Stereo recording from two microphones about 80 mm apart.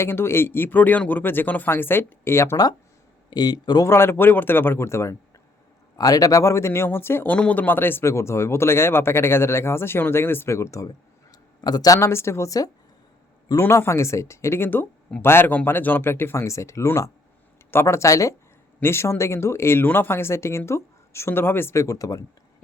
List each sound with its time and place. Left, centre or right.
0.0 s speech: left
3.2 s speech: left
3.8 s speech: left
6.0 s speech: left
7.3 s speech: centre; by 10.8 s left
10.8 s a sound: left
11.9 s speech: left
13.6 s speech: left